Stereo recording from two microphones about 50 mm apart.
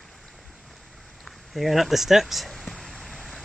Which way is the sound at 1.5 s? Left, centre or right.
Centre.